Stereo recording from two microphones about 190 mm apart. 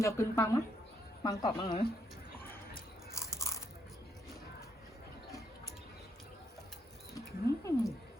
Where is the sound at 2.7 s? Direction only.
15° left (ahead or behind).